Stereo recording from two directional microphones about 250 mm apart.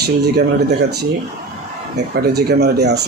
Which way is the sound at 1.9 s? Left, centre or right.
Right.